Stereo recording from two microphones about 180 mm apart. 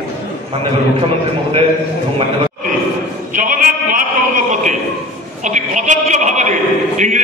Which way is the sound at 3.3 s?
50° right (ahead or behind).